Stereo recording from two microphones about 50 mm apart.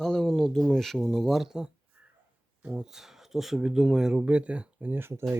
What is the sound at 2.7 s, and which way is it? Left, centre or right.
Speech, centre.